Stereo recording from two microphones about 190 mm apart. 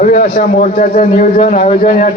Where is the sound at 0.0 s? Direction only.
45° left (ahead or behind).